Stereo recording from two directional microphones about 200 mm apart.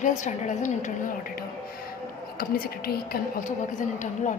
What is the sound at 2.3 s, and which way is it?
A woman's voice, 45° left (ahead or behind).